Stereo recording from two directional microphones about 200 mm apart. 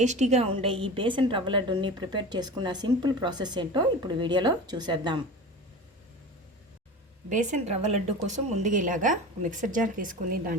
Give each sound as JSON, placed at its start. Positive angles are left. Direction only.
{"t": 0.0, "sound": "a woman's voice", "side_deg": -35}
{"t": 7.3, "sound": "speech", "side_deg": -40}